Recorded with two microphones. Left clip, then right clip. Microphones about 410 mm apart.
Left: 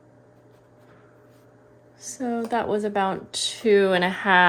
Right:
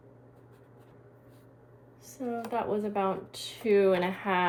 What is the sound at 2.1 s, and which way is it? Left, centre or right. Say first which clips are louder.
Speech: left 7 dB; left.